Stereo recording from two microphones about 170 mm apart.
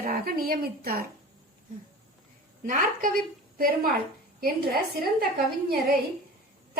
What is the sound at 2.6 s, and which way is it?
A woman's voice, 50° right (ahead or behind).